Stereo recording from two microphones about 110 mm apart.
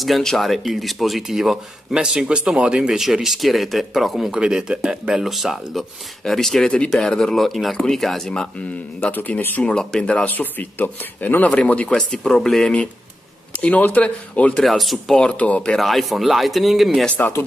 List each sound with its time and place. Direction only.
0.0 s speech: centre (ahead or behind)
9.0 s speech: 15° left (ahead or behind)
14.6 s speech: centre (ahead or behind)
17.1 s speech: 20° left (ahead or behind)